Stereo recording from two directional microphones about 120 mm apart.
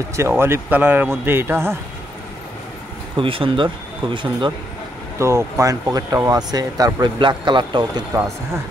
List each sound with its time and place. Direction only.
0.1 s a man's voice: 20° right (ahead or behind)
3.2 s speech: 45° right (ahead or behind)
5.2 s speech: 25° right (ahead or behind)